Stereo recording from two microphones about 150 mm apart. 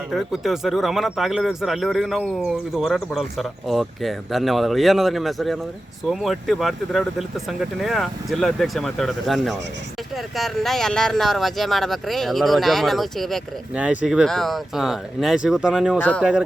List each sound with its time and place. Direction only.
0.1 s speech: centre (ahead or behind)
16.0 s speech: 10° left (ahead or behind)